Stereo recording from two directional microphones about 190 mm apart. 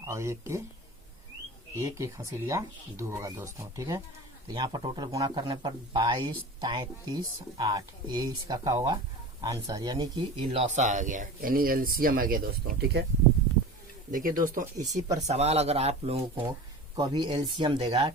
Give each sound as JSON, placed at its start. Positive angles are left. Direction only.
{"t": 0.0, "sound": "speech", "side_deg": -15}
{"t": 1.8, "sound": "speech", "side_deg": -15}
{"t": 10.4, "sound": "speech", "side_deg": -35}
{"t": 14.1, "sound": "speech", "side_deg": -45}